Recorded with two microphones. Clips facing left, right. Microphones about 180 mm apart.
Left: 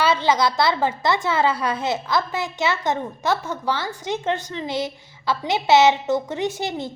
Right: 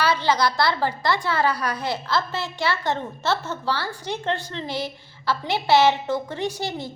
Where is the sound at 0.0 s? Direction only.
20° left (ahead or behind).